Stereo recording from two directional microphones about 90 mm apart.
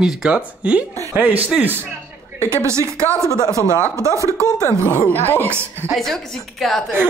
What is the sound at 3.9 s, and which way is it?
Speech, 35° right (ahead or behind).